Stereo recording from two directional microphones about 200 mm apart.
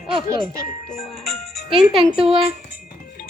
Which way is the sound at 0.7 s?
35° left (ahead or behind).